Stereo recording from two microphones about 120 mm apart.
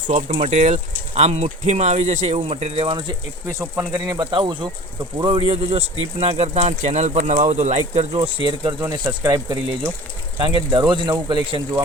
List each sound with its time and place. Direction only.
0.1 s a man's voice: 90° right; by 3.2 s 40° right (ahead or behind)
3.4 s speech: 20° right (ahead or behind)
4.3 s a man's voice: 45° right (ahead or behind); by 8.0 s 80° right
8.1 s speech: 45° right (ahead or behind)